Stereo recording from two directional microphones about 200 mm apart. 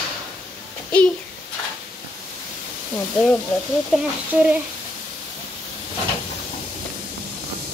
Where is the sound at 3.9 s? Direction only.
5° right (ahead or behind).